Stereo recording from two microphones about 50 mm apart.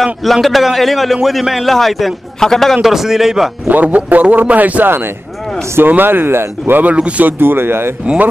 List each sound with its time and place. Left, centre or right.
0.0 s a man's voice: centre
2.8 s a man's voice: centre
3.6 s a man's voice: right
4.8 s a man's voice: right
7.0 s speech: right
7.2 s speech: right